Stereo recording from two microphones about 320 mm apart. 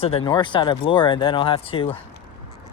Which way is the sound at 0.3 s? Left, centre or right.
Centre.